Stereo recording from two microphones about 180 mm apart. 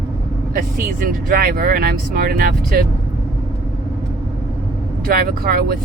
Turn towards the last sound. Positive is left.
turn(degrees=-55)  # may be behind; listen again after turning